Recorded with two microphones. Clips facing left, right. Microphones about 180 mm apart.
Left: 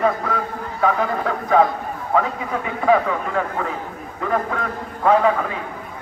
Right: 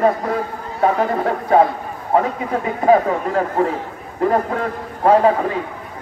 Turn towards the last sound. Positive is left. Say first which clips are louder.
# right 3 dB
turn(degrees=-35)  # may be behind; listen again after turning